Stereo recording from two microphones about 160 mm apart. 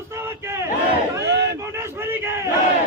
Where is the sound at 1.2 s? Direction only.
90° right.